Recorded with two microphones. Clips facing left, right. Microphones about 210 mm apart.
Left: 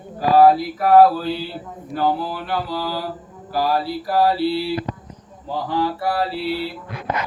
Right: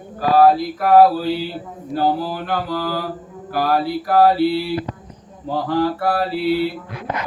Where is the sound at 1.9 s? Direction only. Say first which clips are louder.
Right 2 dB; 35° right (ahead or behind); by 3.0 s 50° right (ahead or behind).